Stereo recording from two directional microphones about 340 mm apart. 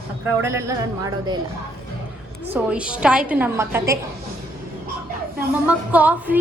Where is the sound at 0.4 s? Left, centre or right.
Centre.